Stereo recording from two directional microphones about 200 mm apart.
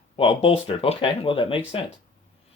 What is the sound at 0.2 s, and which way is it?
Speech, 30° left (ahead or behind).